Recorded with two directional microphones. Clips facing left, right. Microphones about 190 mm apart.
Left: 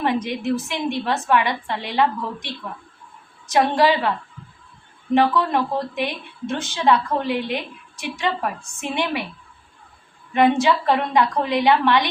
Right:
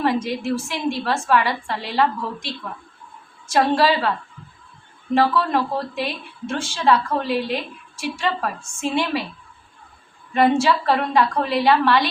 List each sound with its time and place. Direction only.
0.0 s a woman's voice: 15° left (ahead or behind)
3.5 s a woman's voice: 15° left (ahead or behind)
5.1 s a woman's voice: 15° left (ahead or behind)
10.3 s a woman's voice: 15° left (ahead or behind)